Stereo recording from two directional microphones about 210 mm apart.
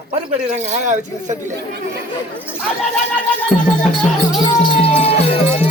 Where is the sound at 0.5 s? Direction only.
35° right (ahead or behind).